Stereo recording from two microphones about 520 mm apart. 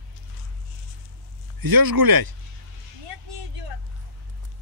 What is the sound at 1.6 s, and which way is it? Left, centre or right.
Speech, right.